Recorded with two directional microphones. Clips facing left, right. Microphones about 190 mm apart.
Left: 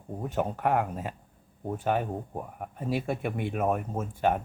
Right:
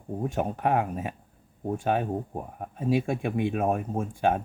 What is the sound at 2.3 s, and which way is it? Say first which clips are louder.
Speech: right 1 dB; 25° right (ahead or behind).